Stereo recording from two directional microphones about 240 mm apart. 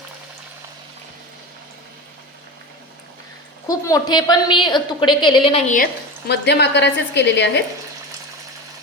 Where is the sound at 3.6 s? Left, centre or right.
Centre.